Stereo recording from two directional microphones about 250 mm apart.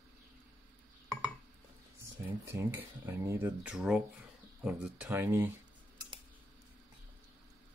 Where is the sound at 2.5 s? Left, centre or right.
Centre.